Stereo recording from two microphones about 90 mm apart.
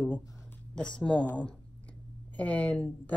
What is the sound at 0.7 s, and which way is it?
A woman's voice, 10° left (ahead or behind).